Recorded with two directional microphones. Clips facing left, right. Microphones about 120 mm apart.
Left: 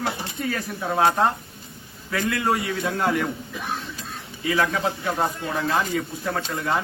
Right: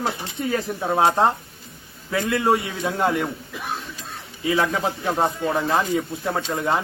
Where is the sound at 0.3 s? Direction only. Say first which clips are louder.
Right 3 dB; 25° right (ahead or behind).